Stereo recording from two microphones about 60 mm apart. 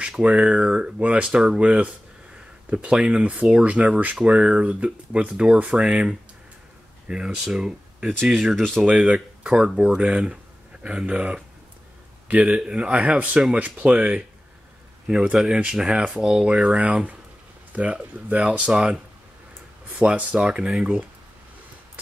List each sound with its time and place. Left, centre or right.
0.0 s speech: centre
8.5 s speech: centre
8.8 s speech: centre
15.3 s speech: centre
20.0 s speech: right